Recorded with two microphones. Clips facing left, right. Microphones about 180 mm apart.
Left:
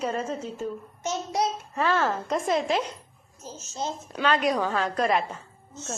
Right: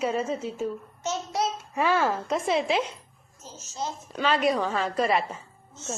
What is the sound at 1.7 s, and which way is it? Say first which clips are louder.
A woman's voice: right 2 dB; 10° right (ahead or behind).